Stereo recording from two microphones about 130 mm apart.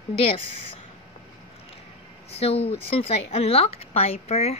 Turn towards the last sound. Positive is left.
turn(degrees=55)  # may be behind; listen again after turning